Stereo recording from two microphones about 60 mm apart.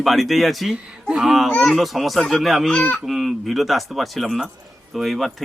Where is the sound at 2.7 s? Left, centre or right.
Left.